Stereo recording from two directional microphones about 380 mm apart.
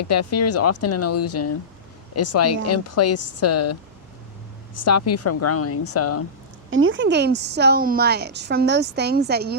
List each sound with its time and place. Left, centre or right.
0.0 s speech: left
6.7 s a woman's voice: right